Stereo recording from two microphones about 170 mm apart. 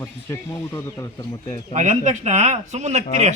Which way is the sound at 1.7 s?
45° right (ahead or behind).